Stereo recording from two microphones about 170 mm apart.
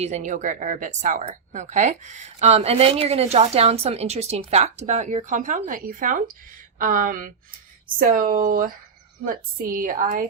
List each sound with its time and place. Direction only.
0.0 s a woman's voice: 45° right (ahead or behind)